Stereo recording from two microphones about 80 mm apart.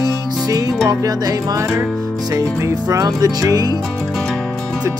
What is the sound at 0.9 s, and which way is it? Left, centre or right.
Music, right.